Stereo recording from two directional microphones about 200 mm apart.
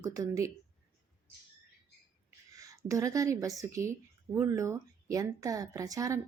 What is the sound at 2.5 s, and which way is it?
Speech, 15° right (ahead or behind).